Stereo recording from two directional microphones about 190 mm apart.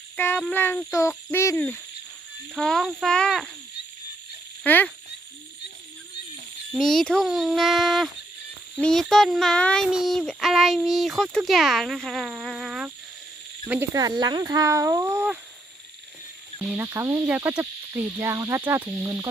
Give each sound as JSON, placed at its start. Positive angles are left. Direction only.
{"t": 0.2, "sound": "hoot", "side_deg": 10}
{"t": 2.6, "sound": "speech", "side_deg": 0}
{"t": 4.6, "sound": "hoot", "side_deg": 10}
{"t": 6.7, "sound": "speech", "side_deg": 0}
{"t": 13.7, "sound": "cricket", "side_deg": -10}
{"t": 16.7, "sound": "cricket", "side_deg": -15}